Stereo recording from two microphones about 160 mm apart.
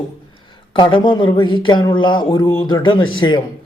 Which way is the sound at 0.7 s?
30° left (ahead or behind).